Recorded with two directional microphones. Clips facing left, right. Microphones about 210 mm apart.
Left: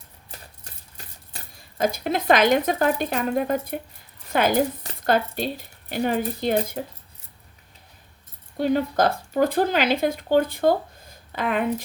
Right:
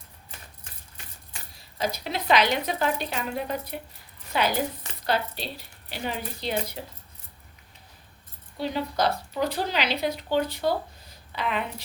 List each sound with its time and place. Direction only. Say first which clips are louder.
0.3 s a sound: left 4 dB; 35° left (ahead or behind)
1.8 s speech: left 6 dB; 50° left (ahead or behind)
8.5 s speech: left 7 dB; 50° left (ahead or behind)